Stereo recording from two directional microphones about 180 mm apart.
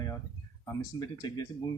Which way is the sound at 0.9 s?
25° left (ahead or behind).